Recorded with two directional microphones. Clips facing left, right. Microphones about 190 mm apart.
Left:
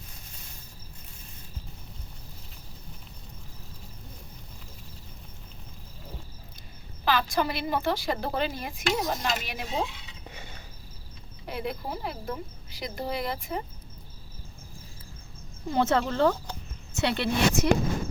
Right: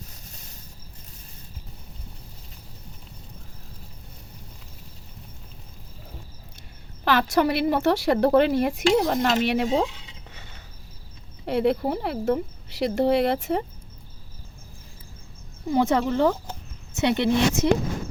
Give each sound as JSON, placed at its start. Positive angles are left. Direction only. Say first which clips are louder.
{"t": 7.0, "sound": "speech", "louder": "right 5 dB", "side_deg": -65}
{"t": 11.4, "sound": "speech", "louder": "right 11 dB", "side_deg": -70}
{"t": 15.7, "sound": "a woman's voice", "louder": "right 4 dB", "side_deg": -15}